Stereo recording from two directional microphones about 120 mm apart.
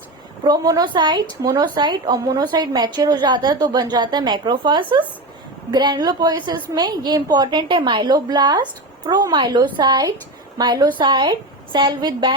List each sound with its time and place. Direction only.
0.4 s a woman's voice: 35° right (ahead or behind)